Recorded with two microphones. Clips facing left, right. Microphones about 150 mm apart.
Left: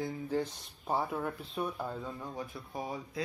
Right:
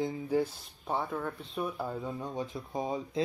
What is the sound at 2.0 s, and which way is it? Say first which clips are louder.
Speech: right 4 dB; 20° right (ahead or behind).